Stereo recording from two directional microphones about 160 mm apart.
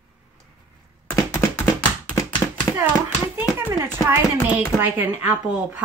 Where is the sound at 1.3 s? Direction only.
20° left (ahead or behind).